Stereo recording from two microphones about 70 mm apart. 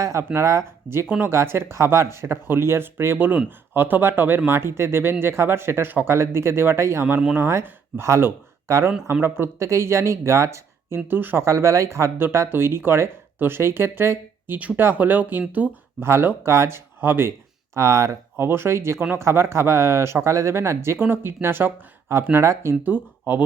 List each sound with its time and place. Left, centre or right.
0.0 s speech: right
0.9 s speech: centre
1.2 s speech: right
11.4 s speech: right
17.7 s speech: right
18.4 s speech: right
22.7 s speech: right